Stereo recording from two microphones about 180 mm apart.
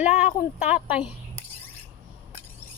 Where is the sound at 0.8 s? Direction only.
5° right (ahead or behind).